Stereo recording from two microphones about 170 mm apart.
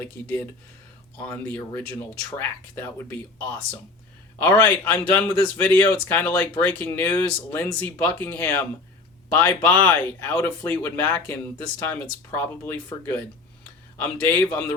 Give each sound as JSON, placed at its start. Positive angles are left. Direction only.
{"t": 1.3, "sound": "a man's voice", "side_deg": 10}
{"t": 4.4, "sound": "a man's voice", "side_deg": 10}
{"t": 12.3, "sound": "a man's voice", "side_deg": 15}